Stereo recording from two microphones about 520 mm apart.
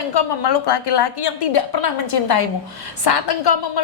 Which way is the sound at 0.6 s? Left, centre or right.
Left.